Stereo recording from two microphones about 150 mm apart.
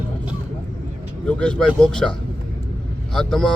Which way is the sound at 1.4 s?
5° left (ahead or behind).